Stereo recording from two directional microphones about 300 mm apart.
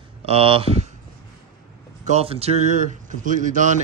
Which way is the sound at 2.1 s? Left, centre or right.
Centre.